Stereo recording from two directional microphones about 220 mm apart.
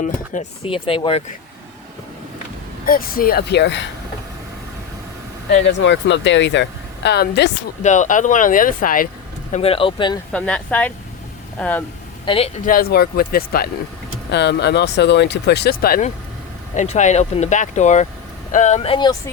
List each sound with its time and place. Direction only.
0.0 s speech: 30° left (ahead or behind)
2.8 s speech: 40° left (ahead or behind)
5.6 s speech: 55° left (ahead or behind)
7.8 s speech: 35° left (ahead or behind)
9.5 s speech: 25° left (ahead or behind)
10.3 s speech: 5° left (ahead or behind)
12.2 s a man's voice: 25° left (ahead or behind)
12.6 s speech: 45° left (ahead or behind); by 19.1 s 25° left (ahead or behind)